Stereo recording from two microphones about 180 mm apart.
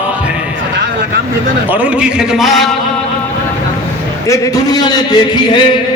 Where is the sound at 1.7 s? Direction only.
5° right (ahead or behind).